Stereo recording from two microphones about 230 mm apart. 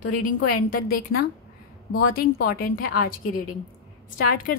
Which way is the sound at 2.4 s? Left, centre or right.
Left.